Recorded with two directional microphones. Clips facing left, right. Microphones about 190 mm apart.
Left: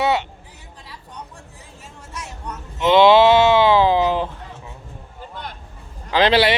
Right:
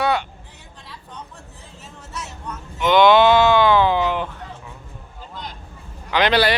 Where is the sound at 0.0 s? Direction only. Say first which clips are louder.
Left 1 dB; 25° left (ahead or behind).